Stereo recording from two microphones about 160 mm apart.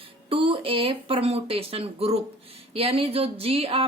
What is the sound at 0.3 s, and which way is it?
Speech, 35° right (ahead or behind).